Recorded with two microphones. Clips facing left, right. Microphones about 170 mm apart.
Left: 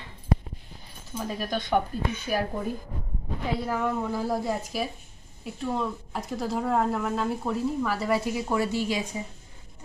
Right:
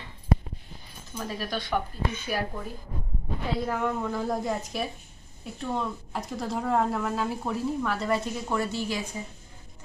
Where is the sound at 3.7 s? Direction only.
5° left (ahead or behind).